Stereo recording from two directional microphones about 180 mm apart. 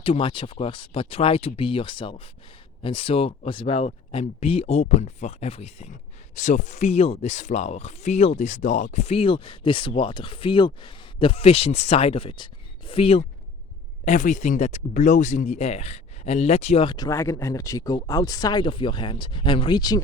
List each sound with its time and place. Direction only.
0.0 s speech: 30° left (ahead or behind)